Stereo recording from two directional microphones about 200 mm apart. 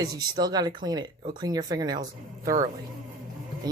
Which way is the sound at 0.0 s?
20° right (ahead or behind).